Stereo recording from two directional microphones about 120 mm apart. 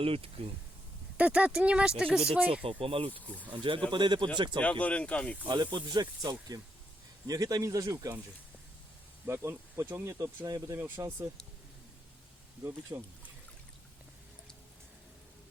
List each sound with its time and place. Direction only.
0.0 s speech: 50° right (ahead or behind)
1.1 s speech: 10° right (ahead or behind)
2.6 s speech: 50° right (ahead or behind)
4.6 s speech: 10° left (ahead or behind)
5.5 s speech: 35° right (ahead or behind)
9.2 s speech: 25° right (ahead or behind)
10.8 s speech: 20° right (ahead or behind)
12.9 s speech: 20° right (ahead or behind)